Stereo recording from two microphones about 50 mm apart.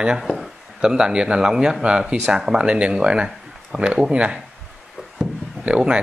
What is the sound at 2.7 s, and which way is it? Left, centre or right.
Speech, right.